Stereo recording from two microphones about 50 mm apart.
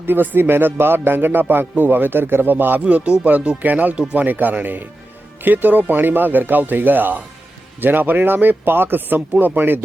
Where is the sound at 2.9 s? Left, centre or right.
Right.